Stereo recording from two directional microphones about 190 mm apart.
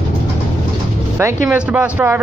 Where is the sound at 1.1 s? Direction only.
10° right (ahead or behind).